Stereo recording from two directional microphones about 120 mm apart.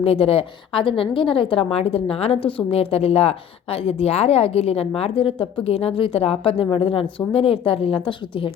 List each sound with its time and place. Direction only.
0.0 s a woman's voice: 55° left (ahead or behind)